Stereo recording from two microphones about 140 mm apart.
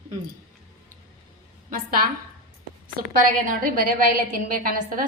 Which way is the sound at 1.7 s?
90° right.